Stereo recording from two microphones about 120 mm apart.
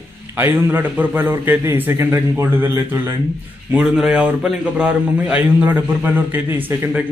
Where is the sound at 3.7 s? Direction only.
10° right (ahead or behind).